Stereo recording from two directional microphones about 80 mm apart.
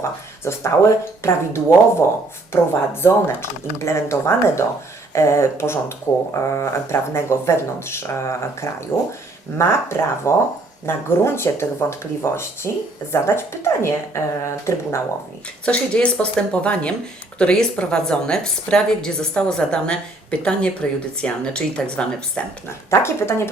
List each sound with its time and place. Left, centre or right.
0.4 s speech: left
15.6 s a woman's voice: centre
22.9 s speech: left